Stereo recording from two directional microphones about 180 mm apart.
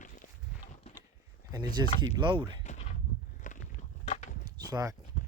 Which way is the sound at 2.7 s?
40° left (ahead or behind).